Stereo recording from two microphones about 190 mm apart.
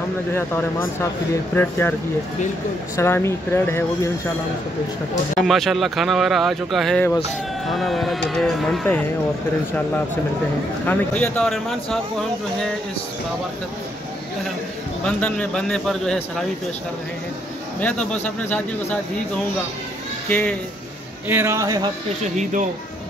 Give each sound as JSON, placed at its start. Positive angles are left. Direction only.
{"t": 0.3, "sound": "speech", "side_deg": 10}
{"t": 3.0, "sound": "speech", "side_deg": 15}
{"t": 5.4, "sound": "speech", "side_deg": 0}
{"t": 10.9, "sound": "speech", "side_deg": 5}
{"t": 15.0, "sound": "speech", "side_deg": 5}
{"t": 17.7, "sound": "speech", "side_deg": 5}
{"t": 21.3, "sound": "speech", "side_deg": -10}
{"t": 22.4, "sound": "speech", "side_deg": -40}